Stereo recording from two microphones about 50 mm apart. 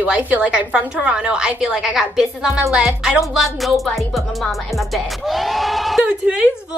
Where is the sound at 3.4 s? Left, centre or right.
Centre.